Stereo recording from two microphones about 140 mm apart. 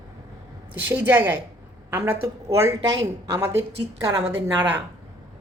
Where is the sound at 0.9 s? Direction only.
15° right (ahead or behind).